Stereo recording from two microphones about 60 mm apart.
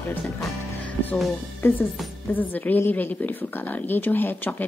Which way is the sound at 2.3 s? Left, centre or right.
Left.